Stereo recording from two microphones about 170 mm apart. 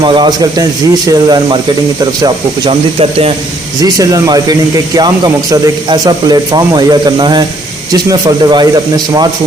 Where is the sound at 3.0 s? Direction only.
35° right (ahead or behind).